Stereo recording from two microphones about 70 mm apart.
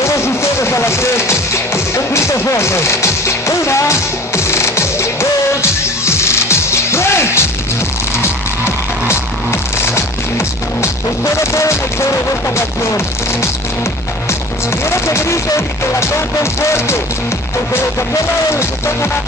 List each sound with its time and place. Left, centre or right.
0.0 s music: left
11.5 s music: left
14.9 s speech: left
16.7 s music: left